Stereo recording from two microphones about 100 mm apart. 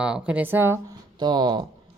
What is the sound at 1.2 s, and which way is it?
Speech, 45° right (ahead or behind).